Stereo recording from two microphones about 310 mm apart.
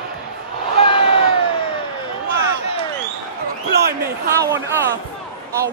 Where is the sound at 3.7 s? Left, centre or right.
Right.